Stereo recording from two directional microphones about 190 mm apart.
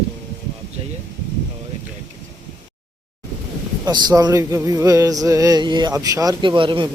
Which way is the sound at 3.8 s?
20° right (ahead or behind).